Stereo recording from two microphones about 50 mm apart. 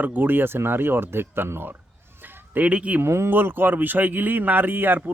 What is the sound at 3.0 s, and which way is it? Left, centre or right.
Speech, right.